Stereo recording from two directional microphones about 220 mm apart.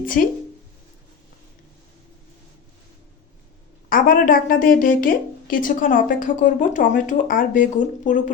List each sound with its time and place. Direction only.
3.8 s a woman's voice: 40° left (ahead or behind)